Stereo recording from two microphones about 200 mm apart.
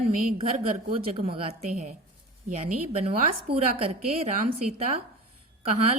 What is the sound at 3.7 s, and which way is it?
A woman's voice, 30° right (ahead or behind).